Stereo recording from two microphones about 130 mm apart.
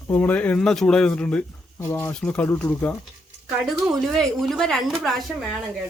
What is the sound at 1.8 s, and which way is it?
Speech, 20° left (ahead or behind).